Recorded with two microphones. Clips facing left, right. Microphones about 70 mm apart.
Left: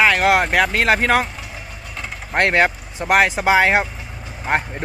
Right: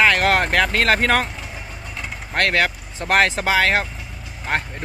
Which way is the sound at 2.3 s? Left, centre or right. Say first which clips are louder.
Left 3 dB; left.